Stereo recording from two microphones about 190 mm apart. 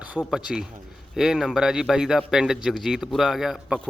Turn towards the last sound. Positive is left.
turn(degrees=0)  # may be behind; listen again after turning